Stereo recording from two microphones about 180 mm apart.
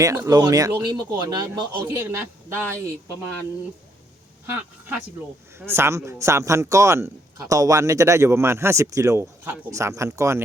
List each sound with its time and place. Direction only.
0.0 s speech: 20° right (ahead or behind)
5.5 s speech: 15° right (ahead or behind)